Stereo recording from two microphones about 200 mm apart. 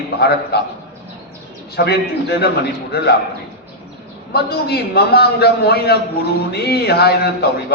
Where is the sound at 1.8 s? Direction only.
55° left (ahead or behind).